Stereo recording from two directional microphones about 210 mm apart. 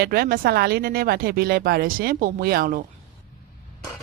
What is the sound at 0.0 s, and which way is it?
Speech, 45° right (ahead or behind).